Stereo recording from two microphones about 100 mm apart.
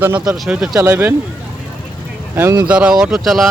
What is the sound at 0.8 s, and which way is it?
Speech, 20° right (ahead or behind).